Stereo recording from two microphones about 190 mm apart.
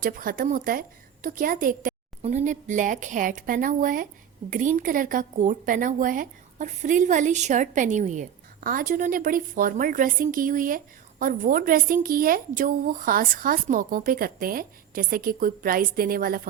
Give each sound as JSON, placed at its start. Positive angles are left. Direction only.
{"t": 0.0, "sound": "a woman's voice", "side_deg": -45}